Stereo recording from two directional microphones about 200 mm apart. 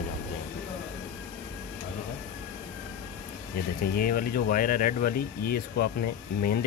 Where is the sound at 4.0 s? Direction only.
45° left (ahead or behind).